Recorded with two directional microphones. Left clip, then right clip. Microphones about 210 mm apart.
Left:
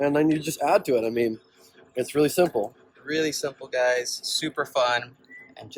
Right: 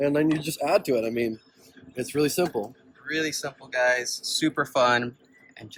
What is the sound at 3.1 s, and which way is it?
Speech, 15° left (ahead or behind).